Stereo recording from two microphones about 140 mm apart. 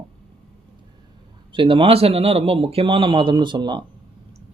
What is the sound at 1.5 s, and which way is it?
A man's voice, 35° right (ahead or behind).